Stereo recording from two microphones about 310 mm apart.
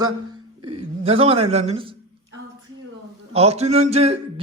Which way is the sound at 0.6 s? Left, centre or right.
Centre.